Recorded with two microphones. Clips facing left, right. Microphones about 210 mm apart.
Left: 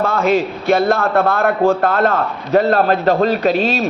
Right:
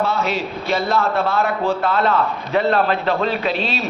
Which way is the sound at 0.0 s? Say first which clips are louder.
Left 6 dB; 50° left (ahead or behind).